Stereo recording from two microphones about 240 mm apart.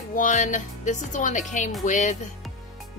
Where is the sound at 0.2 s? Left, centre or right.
Left.